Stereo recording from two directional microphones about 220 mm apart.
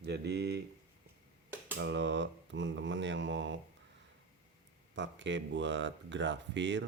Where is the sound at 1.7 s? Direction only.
50° right (ahead or behind).